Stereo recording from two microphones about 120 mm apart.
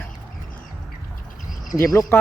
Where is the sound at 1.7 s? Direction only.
25° left (ahead or behind).